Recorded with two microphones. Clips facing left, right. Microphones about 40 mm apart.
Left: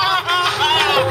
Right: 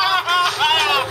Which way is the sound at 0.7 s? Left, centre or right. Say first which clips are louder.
Left 2 dB; centre.